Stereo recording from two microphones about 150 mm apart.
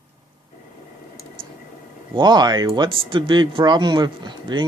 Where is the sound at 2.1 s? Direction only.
30° right (ahead or behind).